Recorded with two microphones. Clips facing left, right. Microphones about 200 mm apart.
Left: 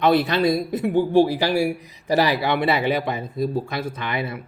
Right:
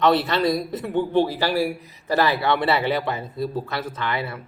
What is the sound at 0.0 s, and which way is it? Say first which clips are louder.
A man's voice: left 1 dB; 15° left (ahead or behind).